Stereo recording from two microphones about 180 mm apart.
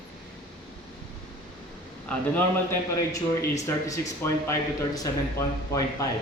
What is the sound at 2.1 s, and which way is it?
A man's voice, 10° left (ahead or behind).